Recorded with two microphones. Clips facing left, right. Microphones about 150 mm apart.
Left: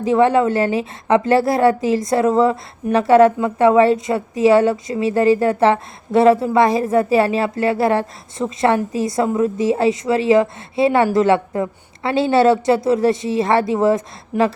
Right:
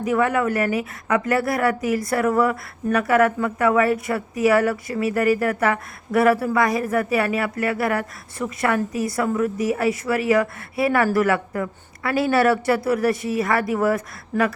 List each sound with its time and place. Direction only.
0.0 s a woman's voice: 25° left (ahead or behind)